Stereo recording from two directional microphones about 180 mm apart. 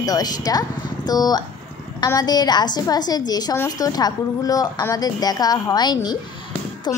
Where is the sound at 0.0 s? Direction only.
20° left (ahead or behind).